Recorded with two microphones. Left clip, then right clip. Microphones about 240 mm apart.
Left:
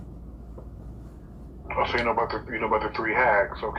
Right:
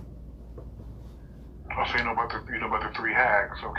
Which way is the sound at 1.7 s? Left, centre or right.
Centre.